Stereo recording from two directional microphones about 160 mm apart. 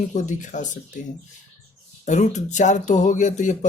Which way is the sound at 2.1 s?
45° left (ahead or behind).